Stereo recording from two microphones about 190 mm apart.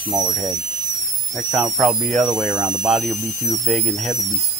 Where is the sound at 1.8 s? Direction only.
Centre (ahead or behind).